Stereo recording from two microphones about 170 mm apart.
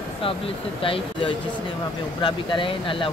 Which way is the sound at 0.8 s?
30° left (ahead or behind).